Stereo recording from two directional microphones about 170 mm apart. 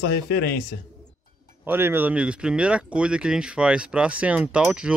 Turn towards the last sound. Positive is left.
turn(degrees=-5)  # may be behind; listen again after turning